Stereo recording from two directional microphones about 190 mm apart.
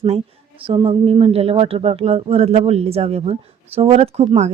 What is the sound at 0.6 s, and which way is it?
Speech, 25° right (ahead or behind).